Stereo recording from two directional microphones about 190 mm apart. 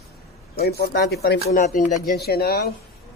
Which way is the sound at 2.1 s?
55° left (ahead or behind).